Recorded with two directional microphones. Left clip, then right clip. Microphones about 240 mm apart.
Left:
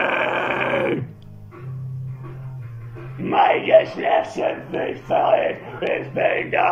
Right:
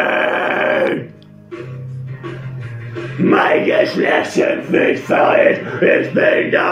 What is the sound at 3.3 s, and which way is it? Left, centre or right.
Speech, centre.